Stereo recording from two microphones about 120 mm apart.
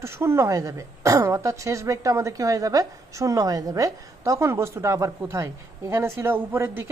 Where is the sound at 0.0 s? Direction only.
20° right (ahead or behind).